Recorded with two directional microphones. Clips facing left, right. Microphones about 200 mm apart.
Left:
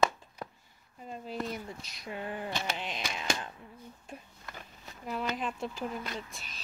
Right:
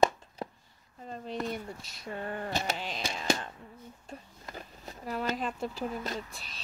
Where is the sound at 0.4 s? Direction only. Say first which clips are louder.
Right 4 dB; 25° right (ahead or behind).